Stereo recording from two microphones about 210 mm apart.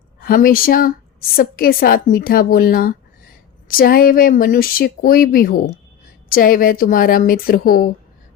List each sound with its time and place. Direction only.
0.2 s speech: 45° left (ahead or behind)